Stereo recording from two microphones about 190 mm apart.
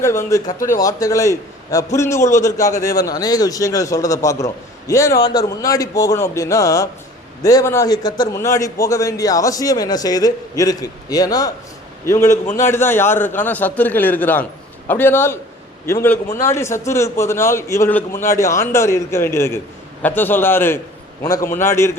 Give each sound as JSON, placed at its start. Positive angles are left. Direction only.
{"t": 0.0, "sound": "a man's voice", "side_deg": 15}
{"t": 12.2, "sound": "a man's voice", "side_deg": 40}
{"t": 12.5, "sound": "a man's voice", "side_deg": 15}